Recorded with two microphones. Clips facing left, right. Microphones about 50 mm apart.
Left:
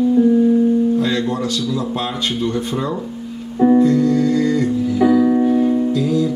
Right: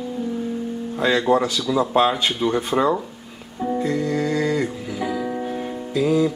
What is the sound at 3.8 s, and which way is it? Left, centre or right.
Music, centre.